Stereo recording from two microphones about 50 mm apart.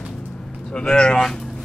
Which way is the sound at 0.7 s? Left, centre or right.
Centre.